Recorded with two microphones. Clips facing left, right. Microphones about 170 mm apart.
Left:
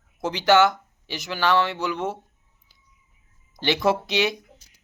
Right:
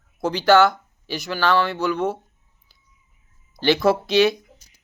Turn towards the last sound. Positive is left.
turn(degrees=20)  # may be behind; listen again after turning